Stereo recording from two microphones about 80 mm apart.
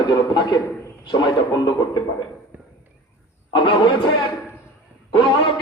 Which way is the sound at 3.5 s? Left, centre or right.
Left.